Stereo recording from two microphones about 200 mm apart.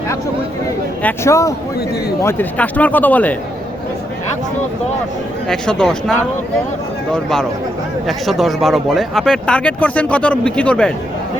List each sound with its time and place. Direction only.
1.0 s speech: 15° left (ahead or behind)
5.5 s speech: 5° left (ahead or behind)